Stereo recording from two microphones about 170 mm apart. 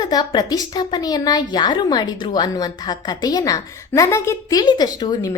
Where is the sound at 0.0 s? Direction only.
25° left (ahead or behind).